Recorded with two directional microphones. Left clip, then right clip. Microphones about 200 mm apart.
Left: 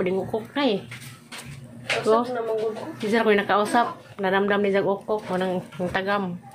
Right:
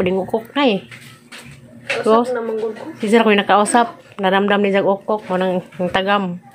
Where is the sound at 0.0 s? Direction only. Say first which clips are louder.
Right 7 dB; 30° right (ahead or behind).